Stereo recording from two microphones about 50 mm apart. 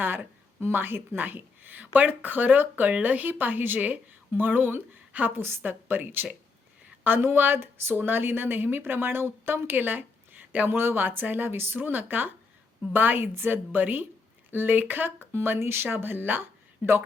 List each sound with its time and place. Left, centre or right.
0.0 s a woman's voice: right
5.1 s a woman's voice: right
5.4 s a woman's voice: right
10.7 s a woman's voice: right
15.3 s speech: right